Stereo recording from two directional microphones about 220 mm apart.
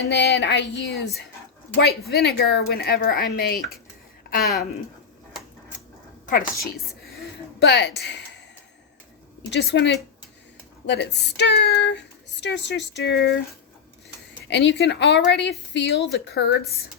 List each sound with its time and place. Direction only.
0.0 s speech: 50° left (ahead or behind)
6.2 s a woman's voice: 40° left (ahead or behind)
7.6 s speech: 50° left (ahead or behind)
9.5 s speech: 55° left (ahead or behind)
14.4 s speech: 55° left (ahead or behind)